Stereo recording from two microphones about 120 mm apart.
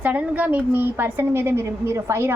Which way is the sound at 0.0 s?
10° right (ahead or behind).